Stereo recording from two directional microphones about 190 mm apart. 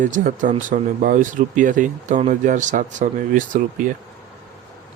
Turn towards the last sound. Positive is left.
turn(degrees=-45)  # may be behind; listen again after turning